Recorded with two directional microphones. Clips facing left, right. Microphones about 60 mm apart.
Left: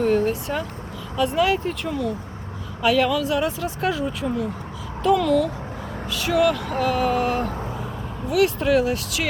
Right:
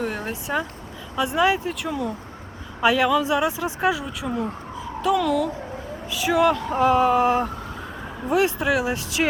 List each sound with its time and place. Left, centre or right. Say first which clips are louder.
0.0 s a sound: left 8 dB; centre
1.1 s speech: even; centre
1.5 s speech: left 1 dB; centre
3.9 s speech: left 3 dB; centre
6.1 s speech: even; centre
8.5 s speech: left 3 dB; centre